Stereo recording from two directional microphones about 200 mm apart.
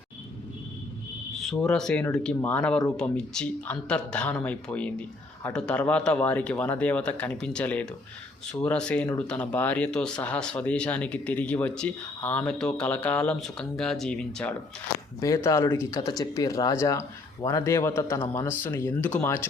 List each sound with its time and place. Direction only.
1.4 s speech: centre (ahead or behind)
15.2 s speech: 15° left (ahead or behind)